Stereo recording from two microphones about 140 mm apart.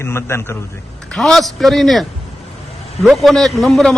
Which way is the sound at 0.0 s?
20° left (ahead or behind).